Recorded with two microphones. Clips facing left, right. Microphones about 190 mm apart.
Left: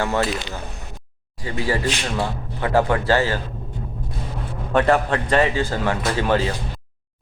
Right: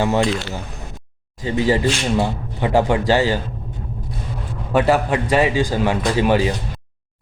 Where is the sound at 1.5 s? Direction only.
20° right (ahead or behind).